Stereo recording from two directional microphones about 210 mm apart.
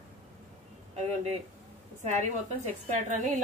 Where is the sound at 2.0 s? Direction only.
30° right (ahead or behind).